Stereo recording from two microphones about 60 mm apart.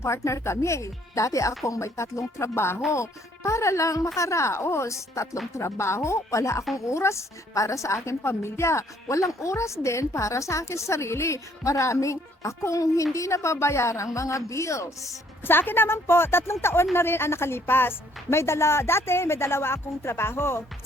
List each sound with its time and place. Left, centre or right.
0.0 s a woman's voice: left
2.9 s a woman's voice: left
15.4 s a woman's voice: left